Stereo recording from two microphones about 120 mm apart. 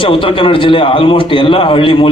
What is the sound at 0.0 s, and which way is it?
A man's voice, 45° left (ahead or behind).